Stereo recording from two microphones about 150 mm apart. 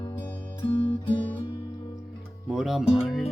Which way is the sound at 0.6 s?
35° left (ahead or behind).